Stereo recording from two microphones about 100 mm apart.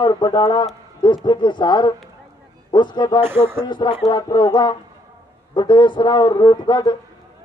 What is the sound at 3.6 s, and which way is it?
A man's voice, 50° left (ahead or behind).